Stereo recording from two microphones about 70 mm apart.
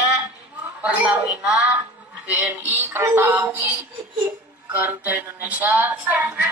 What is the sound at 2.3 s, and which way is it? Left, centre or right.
Synthetic singing, right.